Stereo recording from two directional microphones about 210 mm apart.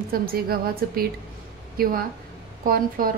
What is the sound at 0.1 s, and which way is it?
A woman's voice, 45° right (ahead or behind).